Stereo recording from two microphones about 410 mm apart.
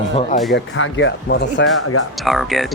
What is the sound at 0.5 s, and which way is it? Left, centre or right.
Speech, left.